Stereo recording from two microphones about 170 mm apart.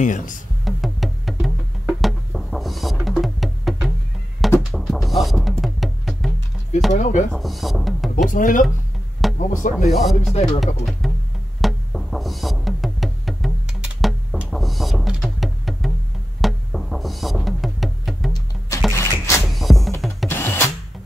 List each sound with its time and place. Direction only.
0.0 s speech: 50° left (ahead or behind)
0.7 s music: centre (ahead or behind)
6.9 s speech: 45° left (ahead or behind)
7.3 s speech: centre (ahead or behind)
8.3 s speech: 50° left (ahead or behind)
9.8 s speech: centre (ahead or behind)
11.6 s music: centre (ahead or behind)
18.9 s a sound: 15° left (ahead or behind)
19.4 s music: centre (ahead or behind)
20.2 s drill: 15° left (ahead or behind)